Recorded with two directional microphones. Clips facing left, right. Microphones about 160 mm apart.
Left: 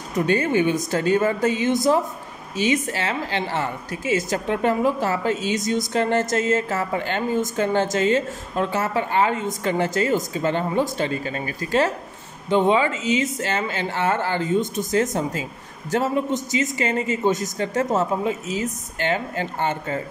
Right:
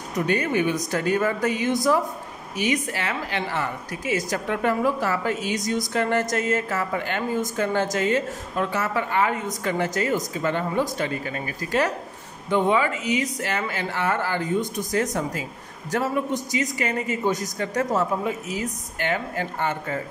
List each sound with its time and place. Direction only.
0.3 s a woman's voice: 30° left (ahead or behind)